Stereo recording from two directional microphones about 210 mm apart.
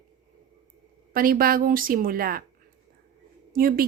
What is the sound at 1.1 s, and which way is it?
Speech, 45° right (ahead or behind).